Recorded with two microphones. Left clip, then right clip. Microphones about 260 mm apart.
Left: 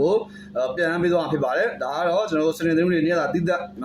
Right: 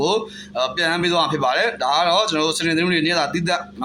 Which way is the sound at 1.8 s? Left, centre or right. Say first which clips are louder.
Right 5 dB; right.